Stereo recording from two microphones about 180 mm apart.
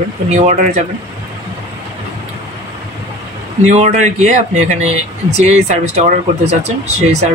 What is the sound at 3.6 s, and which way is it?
Speech, 40° right (ahead or behind).